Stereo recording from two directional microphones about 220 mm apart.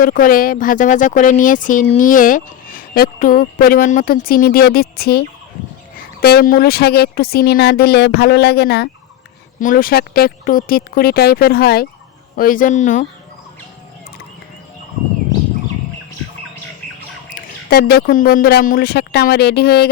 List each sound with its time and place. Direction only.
0.0 s speech: 40° left (ahead or behind)
9.6 s speech: 40° left (ahead or behind)
17.3 s speech: 45° left (ahead or behind)